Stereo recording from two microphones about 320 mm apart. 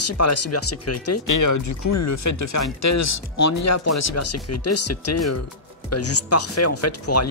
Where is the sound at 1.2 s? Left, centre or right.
Left.